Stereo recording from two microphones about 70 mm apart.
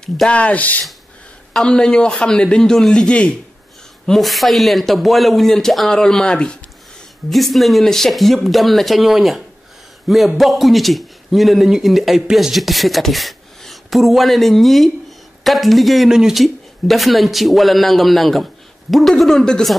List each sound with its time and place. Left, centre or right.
0.3 s speech: centre
4.0 s a man's voice: centre
7.2 s a man's voice: centre